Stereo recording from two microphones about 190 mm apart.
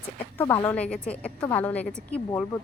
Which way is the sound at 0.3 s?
15° left (ahead or behind).